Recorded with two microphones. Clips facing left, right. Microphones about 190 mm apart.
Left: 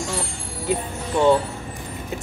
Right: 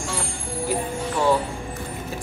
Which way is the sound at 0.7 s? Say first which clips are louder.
Left 1 dB; 20° left (ahead or behind).